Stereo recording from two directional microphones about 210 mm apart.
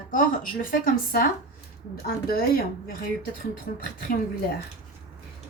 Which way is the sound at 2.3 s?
45° left (ahead or behind).